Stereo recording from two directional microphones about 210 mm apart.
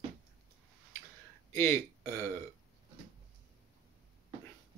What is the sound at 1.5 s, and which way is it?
Speech, 15° left (ahead or behind).